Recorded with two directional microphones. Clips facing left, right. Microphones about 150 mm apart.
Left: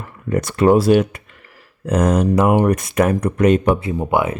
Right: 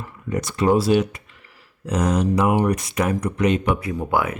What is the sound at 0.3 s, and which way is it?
Speech, 55° left (ahead or behind).